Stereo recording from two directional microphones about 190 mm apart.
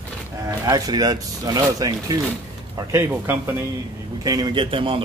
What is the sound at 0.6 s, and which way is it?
A man's voice, 20° right (ahead or behind).